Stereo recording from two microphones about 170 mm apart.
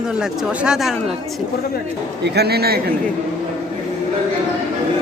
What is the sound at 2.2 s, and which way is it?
Speech, 75° right (ahead or behind).